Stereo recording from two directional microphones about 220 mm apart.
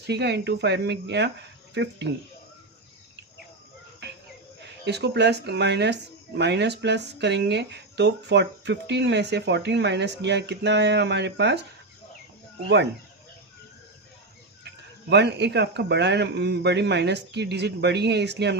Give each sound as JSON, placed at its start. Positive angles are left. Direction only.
{"t": 0.1, "sound": "speech", "side_deg": -50}
{"t": 4.9, "sound": "speech", "side_deg": -50}
{"t": 12.6, "sound": "speech", "side_deg": -50}
{"t": 15.1, "sound": "speech", "side_deg": -50}